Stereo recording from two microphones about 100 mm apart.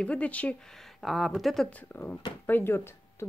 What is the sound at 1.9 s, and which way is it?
Speech, 20° left (ahead or behind).